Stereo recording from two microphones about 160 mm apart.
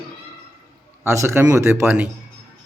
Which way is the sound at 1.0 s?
15° right (ahead or behind).